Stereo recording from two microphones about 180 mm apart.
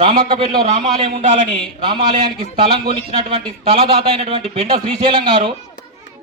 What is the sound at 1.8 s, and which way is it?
A man's voice, 30° right (ahead or behind).